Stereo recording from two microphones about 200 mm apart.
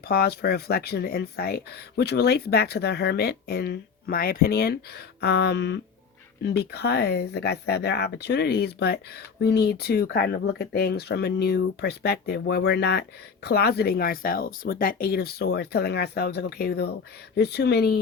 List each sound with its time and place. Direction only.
0.0 s speech: 50° left (ahead or behind)